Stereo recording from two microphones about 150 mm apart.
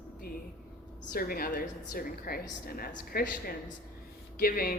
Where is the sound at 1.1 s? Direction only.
75° left (ahead or behind).